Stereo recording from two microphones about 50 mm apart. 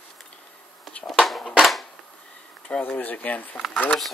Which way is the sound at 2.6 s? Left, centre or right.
Left.